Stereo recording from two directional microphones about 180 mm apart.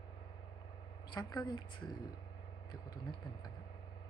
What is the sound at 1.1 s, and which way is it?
Speech, 25° left (ahead or behind).